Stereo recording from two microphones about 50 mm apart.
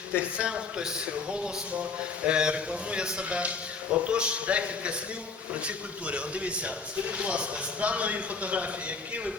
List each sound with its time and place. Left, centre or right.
0.1 s a man's voice: right